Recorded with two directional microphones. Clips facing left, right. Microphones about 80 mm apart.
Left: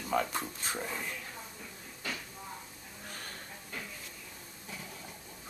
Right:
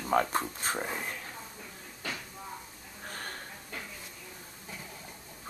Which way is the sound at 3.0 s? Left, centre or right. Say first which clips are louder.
Right 5 dB; right.